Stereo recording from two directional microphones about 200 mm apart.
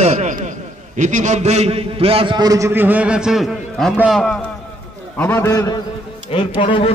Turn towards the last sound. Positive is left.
turn(degrees=25)  # may be behind; listen again after turning